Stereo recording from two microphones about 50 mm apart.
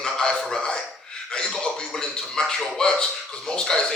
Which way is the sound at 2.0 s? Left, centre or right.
Centre.